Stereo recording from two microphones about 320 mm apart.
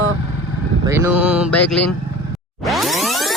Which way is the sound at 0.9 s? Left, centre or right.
Centre.